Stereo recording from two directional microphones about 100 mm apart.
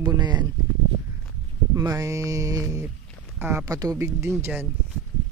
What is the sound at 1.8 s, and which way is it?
Mantra, 35° right (ahead or behind).